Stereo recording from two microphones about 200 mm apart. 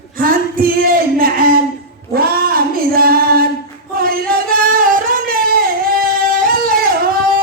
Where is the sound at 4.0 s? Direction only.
45° right (ahead or behind).